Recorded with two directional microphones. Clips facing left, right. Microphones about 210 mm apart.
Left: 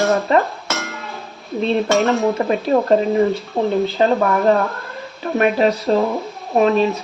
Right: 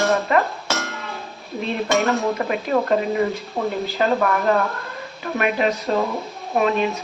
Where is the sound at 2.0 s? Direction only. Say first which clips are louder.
Even; centre (ahead or behind).